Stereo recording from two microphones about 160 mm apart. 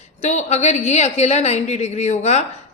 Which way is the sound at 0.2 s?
45° left (ahead or behind).